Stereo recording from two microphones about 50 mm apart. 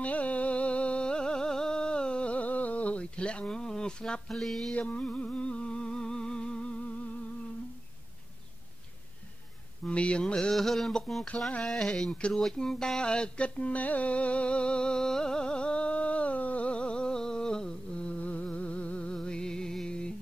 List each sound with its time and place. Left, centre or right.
0.0 s music: left
4.3 s music: centre
4.7 s a sound: left
9.8 s mantra: left; by 11.0 s centre
11.3 s a sound: left
11.8 s mantra: centre
12.3 s music: centre